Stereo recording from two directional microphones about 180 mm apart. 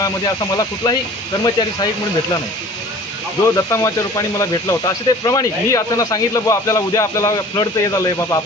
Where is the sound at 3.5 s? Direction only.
15° left (ahead or behind).